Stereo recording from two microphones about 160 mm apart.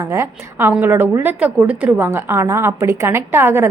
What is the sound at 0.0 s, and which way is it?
A woman's voice, 15° right (ahead or behind).